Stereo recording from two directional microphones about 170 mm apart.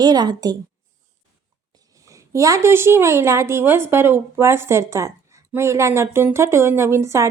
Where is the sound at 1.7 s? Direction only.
20° right (ahead or behind).